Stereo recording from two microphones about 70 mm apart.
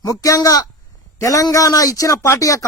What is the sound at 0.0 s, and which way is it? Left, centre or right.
A man's voice, left.